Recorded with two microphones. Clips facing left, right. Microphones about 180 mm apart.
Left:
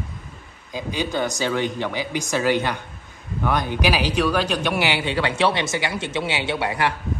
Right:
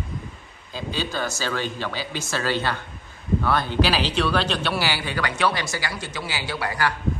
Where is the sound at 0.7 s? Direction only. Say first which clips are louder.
Left 3 dB; 15° left (ahead or behind).